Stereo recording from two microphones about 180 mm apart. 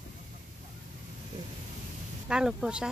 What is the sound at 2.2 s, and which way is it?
Speech, 5° right (ahead or behind).